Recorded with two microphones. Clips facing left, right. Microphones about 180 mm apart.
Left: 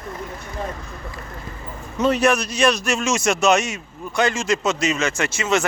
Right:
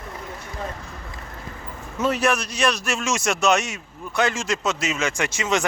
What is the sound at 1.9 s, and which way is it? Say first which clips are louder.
Speech: left 4 dB; 5° right (ahead or behind).